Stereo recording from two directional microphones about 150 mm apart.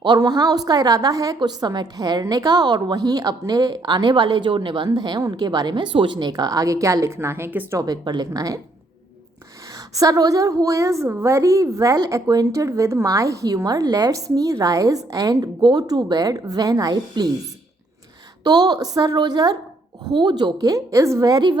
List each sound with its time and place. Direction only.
0.0 s a woman's voice: 30° right (ahead or behind)
7.8 s a woman's voice: 25° right (ahead or behind)
10.0 s a woman's voice: 25° right (ahead or behind)
18.4 s a woman's voice: 25° right (ahead or behind)